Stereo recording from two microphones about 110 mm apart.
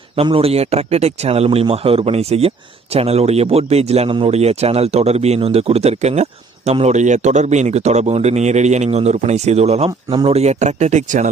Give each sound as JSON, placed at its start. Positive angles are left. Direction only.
{"t": 0.2, "sound": "speech", "side_deg": -60}